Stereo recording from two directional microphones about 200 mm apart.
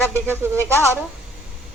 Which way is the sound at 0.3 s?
15° right (ahead or behind).